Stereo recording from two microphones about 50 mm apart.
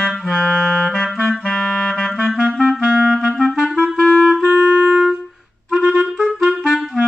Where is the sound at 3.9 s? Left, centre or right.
Centre.